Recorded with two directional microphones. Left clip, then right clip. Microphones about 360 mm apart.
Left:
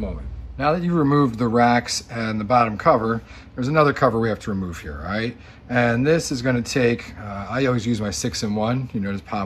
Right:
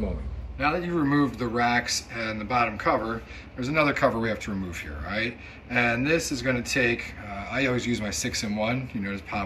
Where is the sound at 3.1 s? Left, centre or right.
Centre.